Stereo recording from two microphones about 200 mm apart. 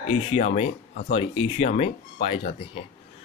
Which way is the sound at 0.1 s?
30° left (ahead or behind).